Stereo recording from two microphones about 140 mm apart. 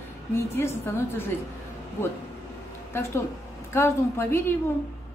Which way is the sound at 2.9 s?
15° left (ahead or behind).